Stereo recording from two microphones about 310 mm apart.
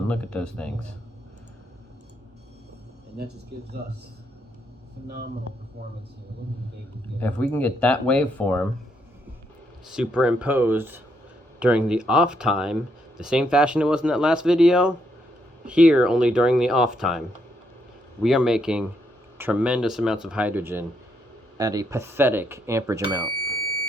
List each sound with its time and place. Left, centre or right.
0.1 s speech: centre
3.2 s speech: right
5.0 s speech: right
7.2 s speech: centre
9.8 s speech: centre